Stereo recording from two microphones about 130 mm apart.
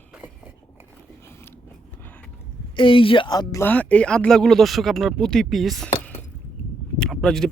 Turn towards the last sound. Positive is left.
turn(degrees=5)  # may be behind; listen again after turning